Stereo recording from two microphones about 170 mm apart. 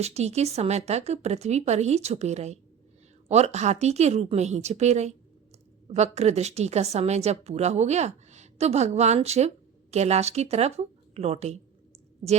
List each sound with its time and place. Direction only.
0.0 s a woman's voice: 40° right (ahead or behind)